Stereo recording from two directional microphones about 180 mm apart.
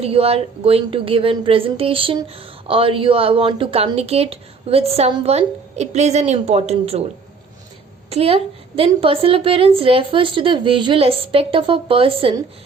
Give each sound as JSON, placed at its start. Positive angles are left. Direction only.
{"t": 0.0, "sound": "speech", "side_deg": -35}
{"t": 8.1, "sound": "speech", "side_deg": -35}